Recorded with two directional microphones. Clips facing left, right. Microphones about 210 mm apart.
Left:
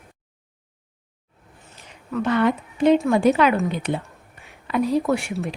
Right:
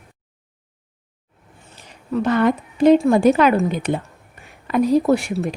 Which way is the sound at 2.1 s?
40° right (ahead or behind).